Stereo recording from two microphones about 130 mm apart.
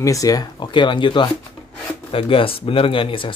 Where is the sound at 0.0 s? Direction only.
25° left (ahead or behind).